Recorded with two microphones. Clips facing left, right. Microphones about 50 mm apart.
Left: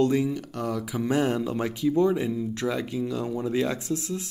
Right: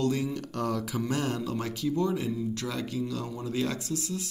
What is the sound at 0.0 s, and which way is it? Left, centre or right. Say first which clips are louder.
Speech: left 6 dB; left.